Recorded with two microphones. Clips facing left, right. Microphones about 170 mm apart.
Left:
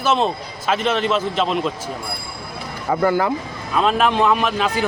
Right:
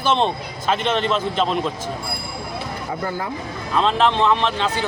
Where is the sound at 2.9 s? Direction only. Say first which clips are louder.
Left 10 dB; 80° left.